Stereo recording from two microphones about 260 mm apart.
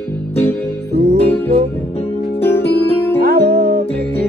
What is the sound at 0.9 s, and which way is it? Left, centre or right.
Music, right.